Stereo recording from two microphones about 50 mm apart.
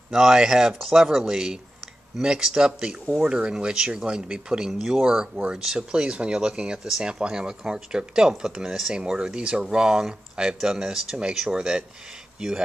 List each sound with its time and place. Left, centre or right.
0.1 s speech: centre
4.7 s speech: centre
5.0 s speech: centre
6.8 s speech: centre